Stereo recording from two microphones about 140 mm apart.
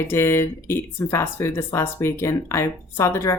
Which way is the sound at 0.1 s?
20° left (ahead or behind).